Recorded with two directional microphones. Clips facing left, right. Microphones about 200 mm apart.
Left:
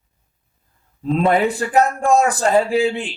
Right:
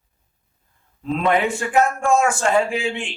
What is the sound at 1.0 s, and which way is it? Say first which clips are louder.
A man's voice: left 3 dB; 35° left (ahead or behind).